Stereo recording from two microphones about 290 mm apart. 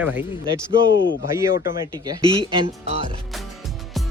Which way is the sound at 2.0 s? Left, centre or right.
Centre.